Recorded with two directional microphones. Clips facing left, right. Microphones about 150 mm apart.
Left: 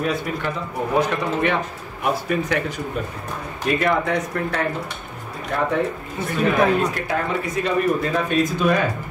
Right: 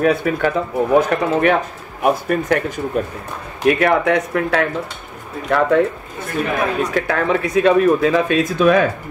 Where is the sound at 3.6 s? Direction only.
60° right (ahead or behind).